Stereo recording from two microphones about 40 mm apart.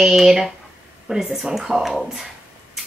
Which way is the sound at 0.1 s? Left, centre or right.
Centre.